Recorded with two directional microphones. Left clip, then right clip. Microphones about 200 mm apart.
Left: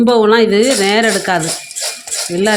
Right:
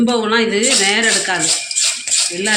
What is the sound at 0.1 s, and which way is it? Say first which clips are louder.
Speech: left 6 dB; 60° left (ahead or behind).